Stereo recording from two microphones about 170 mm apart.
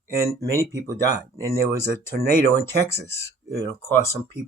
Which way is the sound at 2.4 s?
15° left (ahead or behind).